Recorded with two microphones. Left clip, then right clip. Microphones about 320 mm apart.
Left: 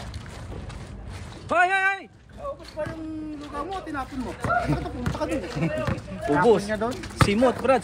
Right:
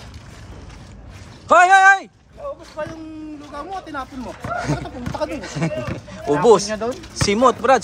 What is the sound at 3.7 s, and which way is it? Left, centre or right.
Speech, right.